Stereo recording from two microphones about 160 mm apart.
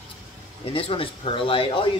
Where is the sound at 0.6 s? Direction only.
35° left (ahead or behind).